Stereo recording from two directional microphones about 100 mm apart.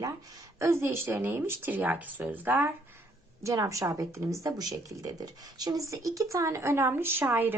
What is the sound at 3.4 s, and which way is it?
Speech, 35° right (ahead or behind).